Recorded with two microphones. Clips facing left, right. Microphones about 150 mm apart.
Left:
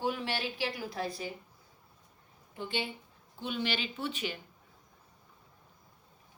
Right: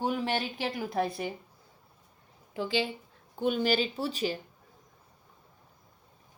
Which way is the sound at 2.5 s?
90° right.